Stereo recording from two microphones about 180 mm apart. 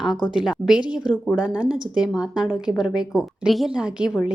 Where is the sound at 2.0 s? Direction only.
20° left (ahead or behind).